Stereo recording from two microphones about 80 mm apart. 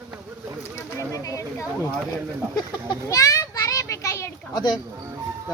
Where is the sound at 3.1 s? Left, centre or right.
Left.